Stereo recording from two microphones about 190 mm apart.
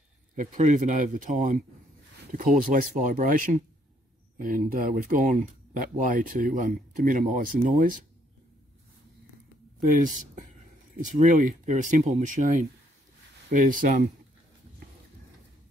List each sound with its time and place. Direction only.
0.4 s speech: 40° right (ahead or behind)
9.8 s speech: 45° right (ahead or behind)